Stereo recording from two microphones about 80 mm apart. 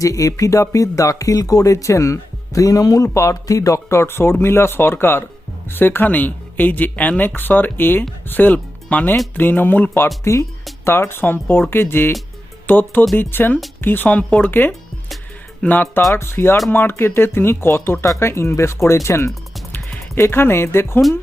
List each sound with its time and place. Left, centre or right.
0.0 s speech: left